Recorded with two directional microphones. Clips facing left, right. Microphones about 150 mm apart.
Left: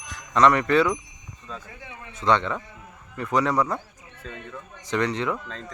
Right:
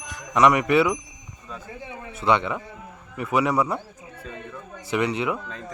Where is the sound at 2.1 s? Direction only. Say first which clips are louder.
Even; 10° right (ahead or behind).